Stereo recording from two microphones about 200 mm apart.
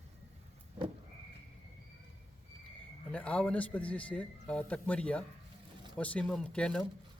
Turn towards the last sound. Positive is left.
turn(degrees=5)  # may be behind; listen again after turning